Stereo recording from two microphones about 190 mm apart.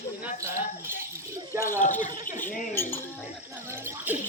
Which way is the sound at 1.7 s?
40° left (ahead or behind).